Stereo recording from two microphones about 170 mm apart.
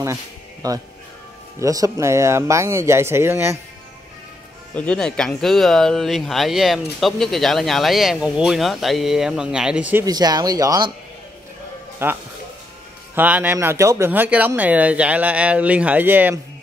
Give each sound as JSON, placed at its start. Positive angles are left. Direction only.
{"t": 0.0, "sound": "speech", "side_deg": -20}
{"t": 4.7, "sound": "speech", "side_deg": 5}
{"t": 10.0, "sound": "speech", "side_deg": -20}
{"t": 12.0, "sound": "speech", "side_deg": -15}